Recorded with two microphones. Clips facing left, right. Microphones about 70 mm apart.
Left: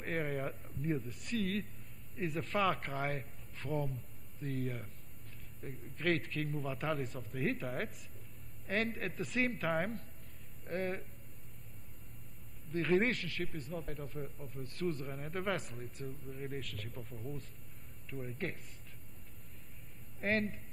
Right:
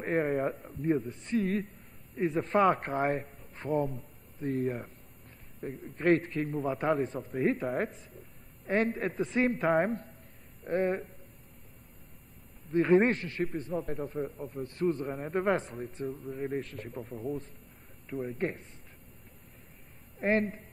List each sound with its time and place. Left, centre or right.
0.0 s a man's voice: right
12.7 s a man's voice: right
17.0 s a man's voice: right
18.2 s a man's voice: right
20.2 s a man's voice: right